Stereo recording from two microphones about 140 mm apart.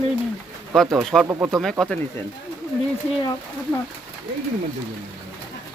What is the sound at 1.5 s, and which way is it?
Speech, centre (ahead or behind).